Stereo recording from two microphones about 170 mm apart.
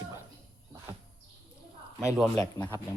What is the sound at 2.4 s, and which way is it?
Speech, 20° left (ahead or behind).